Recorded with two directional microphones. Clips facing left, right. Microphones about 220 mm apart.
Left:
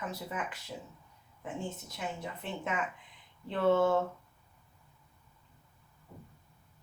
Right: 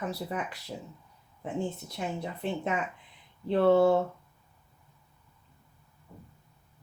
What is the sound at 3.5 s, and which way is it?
Speech, 35° right (ahead or behind).